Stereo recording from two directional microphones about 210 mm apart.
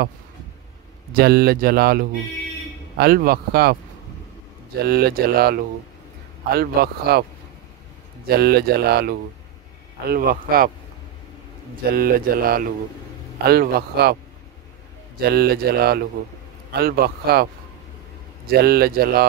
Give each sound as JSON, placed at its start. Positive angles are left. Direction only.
{"t": 1.1, "sound": "speech", "side_deg": -50}
{"t": 4.8, "sound": "speech", "side_deg": -50}
{"t": 8.3, "sound": "speech", "side_deg": -50}
{"t": 11.9, "sound": "speech", "side_deg": -45}
{"t": 15.1, "sound": "speech", "side_deg": -50}
{"t": 18.5, "sound": "speech", "side_deg": -45}